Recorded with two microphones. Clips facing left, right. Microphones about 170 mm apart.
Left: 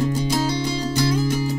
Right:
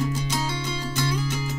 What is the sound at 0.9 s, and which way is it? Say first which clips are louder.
Music: left 7 dB; 35° left (ahead or behind).